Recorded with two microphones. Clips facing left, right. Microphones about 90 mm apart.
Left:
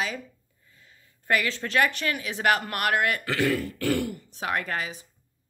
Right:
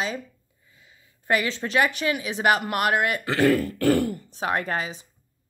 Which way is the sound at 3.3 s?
45° right (ahead or behind).